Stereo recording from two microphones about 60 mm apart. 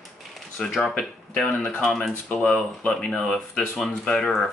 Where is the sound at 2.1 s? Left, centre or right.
Left.